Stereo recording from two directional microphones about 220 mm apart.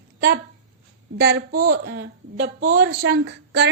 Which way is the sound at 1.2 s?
50° right (ahead or behind).